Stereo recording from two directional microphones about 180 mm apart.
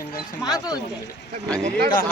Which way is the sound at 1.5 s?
20° right (ahead or behind).